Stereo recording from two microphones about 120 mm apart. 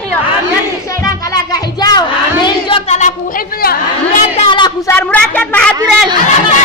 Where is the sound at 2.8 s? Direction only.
65° left (ahead or behind).